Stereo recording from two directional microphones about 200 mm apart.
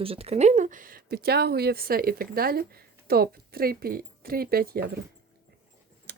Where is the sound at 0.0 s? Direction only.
30° right (ahead or behind); by 4.9 s 50° right (ahead or behind).